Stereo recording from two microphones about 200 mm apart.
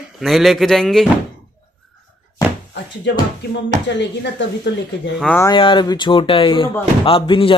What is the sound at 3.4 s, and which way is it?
Speech, 60° left (ahead or behind).